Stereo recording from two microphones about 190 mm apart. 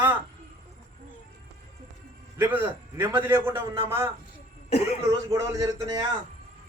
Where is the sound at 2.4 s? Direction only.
10° right (ahead or behind).